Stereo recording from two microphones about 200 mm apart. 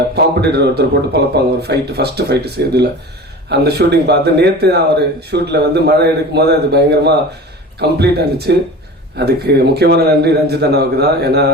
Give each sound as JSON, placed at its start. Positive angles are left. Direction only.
{"t": 0.4, "sound": "a man's voice", "side_deg": -55}